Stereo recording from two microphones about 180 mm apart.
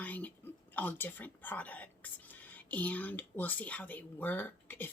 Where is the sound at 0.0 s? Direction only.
10° left (ahead or behind).